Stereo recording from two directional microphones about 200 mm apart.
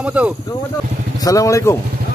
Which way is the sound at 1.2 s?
15° left (ahead or behind).